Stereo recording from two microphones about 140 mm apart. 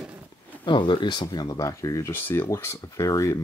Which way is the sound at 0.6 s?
35° left (ahead or behind).